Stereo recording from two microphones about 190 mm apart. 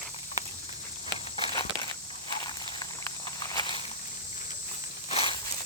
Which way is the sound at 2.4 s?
20° left (ahead or behind).